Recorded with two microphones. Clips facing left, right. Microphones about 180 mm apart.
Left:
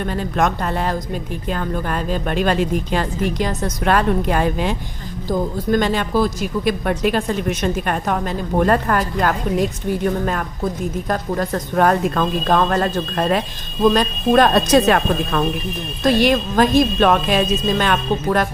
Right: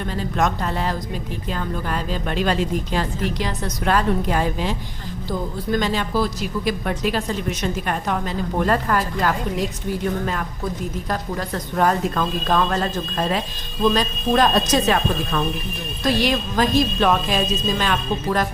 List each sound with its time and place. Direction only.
0.1 s a woman's voice: 55° left (ahead or behind)
11.1 s a woman's voice: 50° left (ahead or behind)